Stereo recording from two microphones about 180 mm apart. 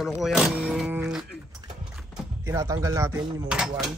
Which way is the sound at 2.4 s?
15° right (ahead or behind).